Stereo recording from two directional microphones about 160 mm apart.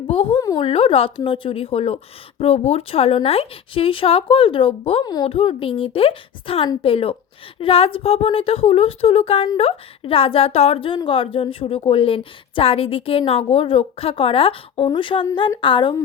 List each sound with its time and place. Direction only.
0.1 s a woman's voice: 35° left (ahead or behind)
5.0 s a woman's voice: 25° left (ahead or behind)
5.3 s a woman's voice: 35° left (ahead or behind)